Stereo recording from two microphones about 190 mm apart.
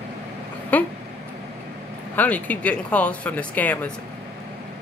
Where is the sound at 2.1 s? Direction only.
10° left (ahead or behind).